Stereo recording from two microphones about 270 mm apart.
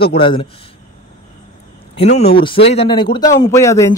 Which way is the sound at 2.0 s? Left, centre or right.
Left.